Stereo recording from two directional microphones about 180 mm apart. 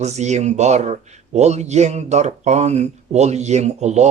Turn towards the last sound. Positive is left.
turn(degrees=-40)  # may be behind; listen again after turning